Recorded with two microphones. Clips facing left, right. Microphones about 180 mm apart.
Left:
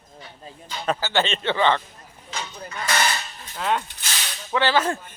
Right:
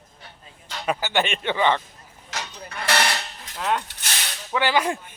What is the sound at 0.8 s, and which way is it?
Speech, 15° right (ahead or behind).